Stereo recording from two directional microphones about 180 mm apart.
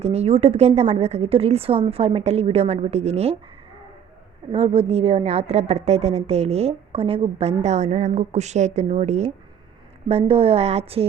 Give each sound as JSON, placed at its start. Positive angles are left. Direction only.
{"t": 0.0, "sound": "a woman's voice", "side_deg": -35}
{"t": 4.5, "sound": "a woman's voice", "side_deg": -30}